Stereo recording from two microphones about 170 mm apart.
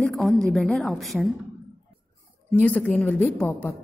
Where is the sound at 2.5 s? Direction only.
10° left (ahead or behind).